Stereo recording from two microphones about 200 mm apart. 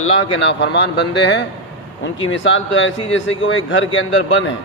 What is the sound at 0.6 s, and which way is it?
Speech, 60° left (ahead or behind).